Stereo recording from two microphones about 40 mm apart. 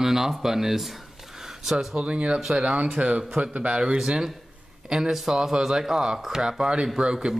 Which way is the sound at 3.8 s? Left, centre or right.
Centre.